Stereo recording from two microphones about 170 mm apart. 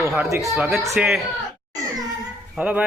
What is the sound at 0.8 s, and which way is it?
Speech, 15° right (ahead or behind).